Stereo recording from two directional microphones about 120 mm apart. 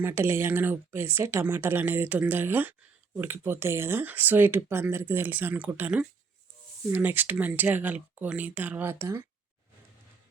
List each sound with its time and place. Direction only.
0.0 s speech: 20° right (ahead or behind)